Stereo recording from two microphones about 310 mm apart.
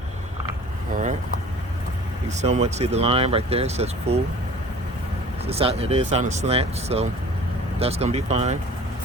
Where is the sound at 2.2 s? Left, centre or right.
Right.